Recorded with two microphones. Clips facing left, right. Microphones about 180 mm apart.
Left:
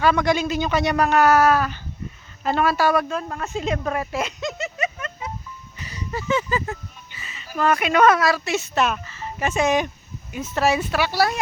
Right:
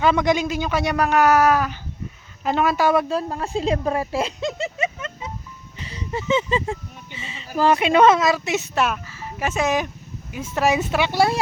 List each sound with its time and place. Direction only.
0.0 s speech: 20° right (ahead or behind)
3.1 s speech: 30° right (ahead or behind)